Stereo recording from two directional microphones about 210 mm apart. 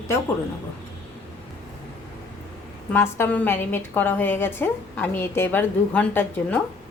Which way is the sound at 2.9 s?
10° left (ahead or behind).